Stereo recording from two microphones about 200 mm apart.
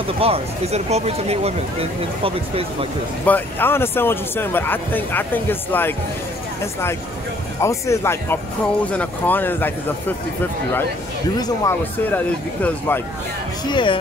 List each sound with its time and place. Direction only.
0.2 s speech: 30° right (ahead or behind)
3.3 s speech: 10° left (ahead or behind)
13.7 s speech: 25° left (ahead or behind)